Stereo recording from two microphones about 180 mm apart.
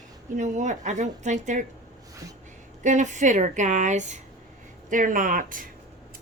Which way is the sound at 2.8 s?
40° right (ahead or behind).